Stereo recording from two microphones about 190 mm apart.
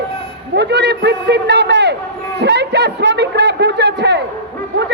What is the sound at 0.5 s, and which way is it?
A woman's voice, 60° right (ahead or behind).